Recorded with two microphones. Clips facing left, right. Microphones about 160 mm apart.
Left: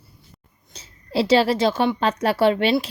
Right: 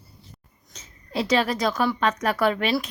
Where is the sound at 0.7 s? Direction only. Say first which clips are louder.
Left 5 dB; 30° left (ahead or behind).